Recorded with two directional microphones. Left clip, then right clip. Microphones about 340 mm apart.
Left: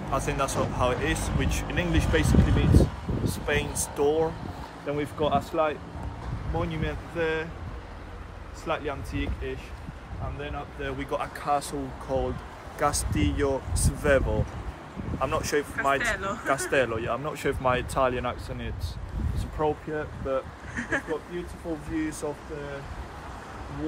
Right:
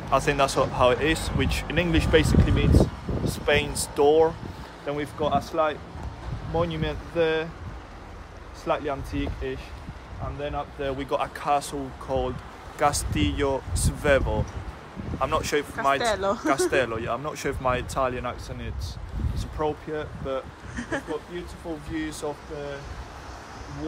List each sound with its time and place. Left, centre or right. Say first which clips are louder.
0.1 s speech: right 6 dB; centre
4.8 s speech: even; centre
6.5 s speech: right 5 dB; right
8.6 s speech: right 4 dB; right
10.8 s speech: right 3 dB; right; by 21.0 s centre
22.2 s speech: right 1 dB; centre